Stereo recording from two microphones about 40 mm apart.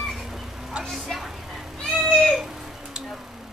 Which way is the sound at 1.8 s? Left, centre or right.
Centre.